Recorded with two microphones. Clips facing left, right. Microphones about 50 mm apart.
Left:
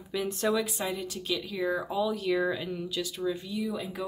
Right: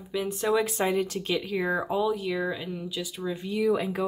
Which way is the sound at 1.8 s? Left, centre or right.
Right.